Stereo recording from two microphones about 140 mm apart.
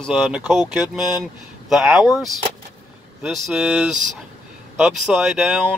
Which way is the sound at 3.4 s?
5° right (ahead or behind).